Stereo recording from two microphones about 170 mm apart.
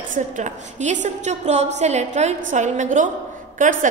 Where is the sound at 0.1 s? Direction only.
45° right (ahead or behind).